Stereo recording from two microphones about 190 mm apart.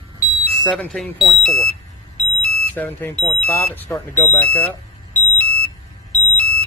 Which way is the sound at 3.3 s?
5° left (ahead or behind).